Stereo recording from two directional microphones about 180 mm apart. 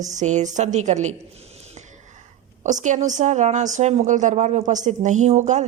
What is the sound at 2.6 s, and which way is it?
A woman's voice, 45° right (ahead or behind).